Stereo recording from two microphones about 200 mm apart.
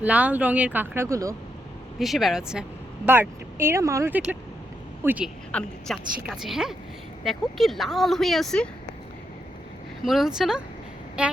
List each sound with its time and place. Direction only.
0.0 s speech: 5° right (ahead or behind)
2.0 s speech: centre (ahead or behind)
5.5 s a woman's voice: 5° left (ahead or behind)
10.0 s speech: centre (ahead or behind)